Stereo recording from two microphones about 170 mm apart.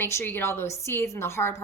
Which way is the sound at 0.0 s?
15° left (ahead or behind).